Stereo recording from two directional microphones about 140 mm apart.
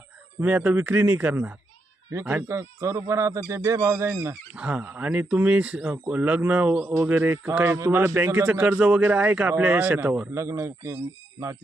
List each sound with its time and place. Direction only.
0.3 s speech: 10° right (ahead or behind)